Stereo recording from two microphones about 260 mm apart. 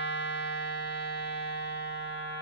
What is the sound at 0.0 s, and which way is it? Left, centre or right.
Music, left.